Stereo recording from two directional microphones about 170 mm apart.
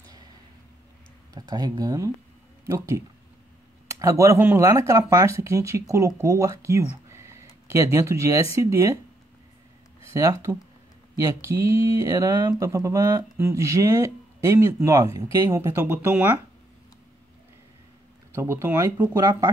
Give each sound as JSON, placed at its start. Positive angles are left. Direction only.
{"t": 1.3, "sound": "speech", "side_deg": -25}
{"t": 4.0, "sound": "speech", "side_deg": -20}
{"t": 10.1, "sound": "speech", "side_deg": -20}
{"t": 18.3, "sound": "speech", "side_deg": -15}